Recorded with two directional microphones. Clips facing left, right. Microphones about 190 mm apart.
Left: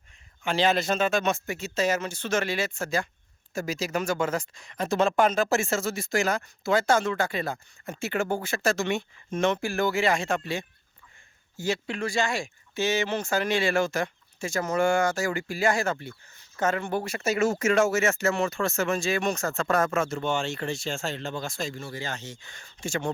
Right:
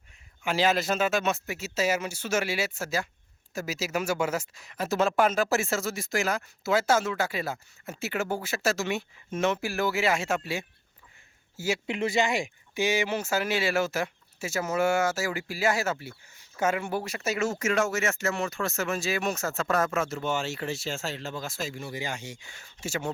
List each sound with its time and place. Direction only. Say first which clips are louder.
0.4 s a man's voice: left 1 dB; 5° right (ahead or behind)
11.9 s speech: right 2 dB; 20° right (ahead or behind); by 17.3 s 5° right (ahead or behind)
17.3 s speech: left 5 dB; 55° left (ahead or behind)
18.3 s speech: left 4 dB; centre (ahead or behind)